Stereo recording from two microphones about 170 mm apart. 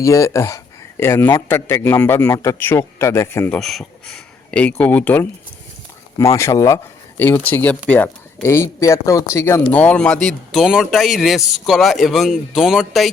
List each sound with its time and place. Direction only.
0.0 s a man's voice: 20° left (ahead or behind)
3.6 s a man's voice: centre (ahead or behind)